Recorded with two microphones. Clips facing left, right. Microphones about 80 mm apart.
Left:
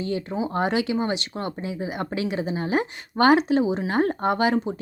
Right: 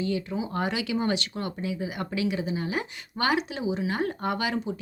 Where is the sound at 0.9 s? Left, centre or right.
Left.